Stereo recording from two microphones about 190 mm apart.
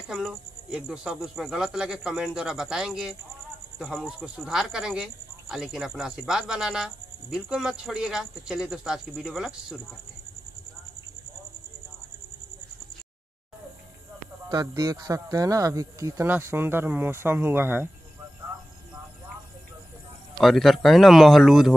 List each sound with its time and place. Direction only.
0.1 s speech: centre (ahead or behind)
14.5 s speech: 20° right (ahead or behind)
20.3 s speech: centre (ahead or behind)